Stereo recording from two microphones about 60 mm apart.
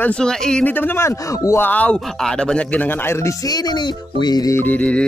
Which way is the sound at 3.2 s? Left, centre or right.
Left.